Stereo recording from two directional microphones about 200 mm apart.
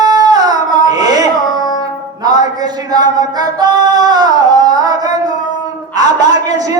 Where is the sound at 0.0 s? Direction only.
20° right (ahead or behind).